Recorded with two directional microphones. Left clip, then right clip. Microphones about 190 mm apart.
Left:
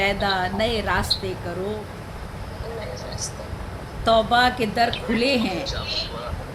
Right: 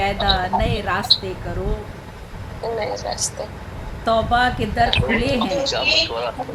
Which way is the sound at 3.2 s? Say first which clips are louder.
Right 6 dB; 45° right (ahead or behind).